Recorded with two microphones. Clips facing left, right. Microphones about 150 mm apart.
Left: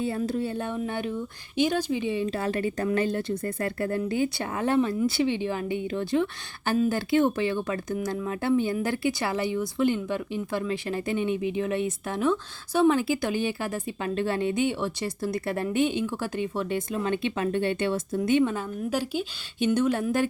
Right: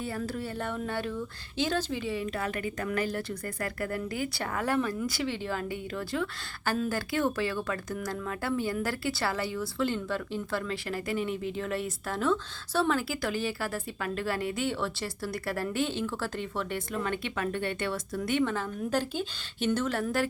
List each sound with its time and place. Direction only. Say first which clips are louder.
0.0 s speech: left 6 dB; 20° left (ahead or behind)